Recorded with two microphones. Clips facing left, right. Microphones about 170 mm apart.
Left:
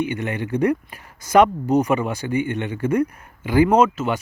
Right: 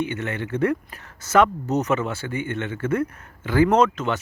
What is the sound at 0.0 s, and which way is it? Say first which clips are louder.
Speech: left 3 dB; 15° left (ahead or behind).